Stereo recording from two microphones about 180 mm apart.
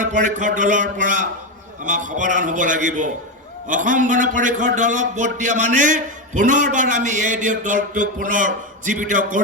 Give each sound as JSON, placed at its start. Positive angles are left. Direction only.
{"t": 0.0, "sound": "a man's voice", "side_deg": -45}